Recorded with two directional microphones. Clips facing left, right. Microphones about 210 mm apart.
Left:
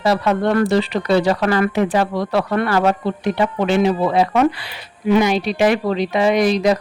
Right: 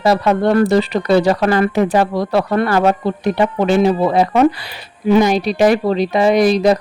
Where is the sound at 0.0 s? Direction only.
40° right (ahead or behind).